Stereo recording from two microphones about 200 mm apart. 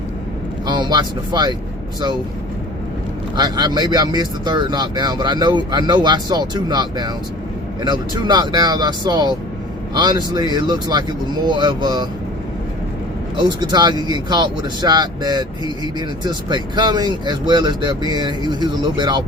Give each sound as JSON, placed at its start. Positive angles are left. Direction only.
{"t": 0.7, "sound": "speech", "side_deg": -20}
{"t": 3.3, "sound": "speech", "side_deg": -20}
{"t": 13.3, "sound": "speech", "side_deg": -20}